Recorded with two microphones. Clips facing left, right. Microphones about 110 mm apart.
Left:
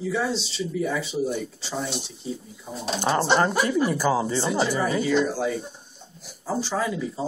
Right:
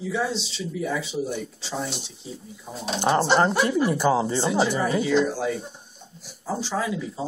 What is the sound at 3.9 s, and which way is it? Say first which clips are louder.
Speech: right 2 dB; 25° right (ahead or behind).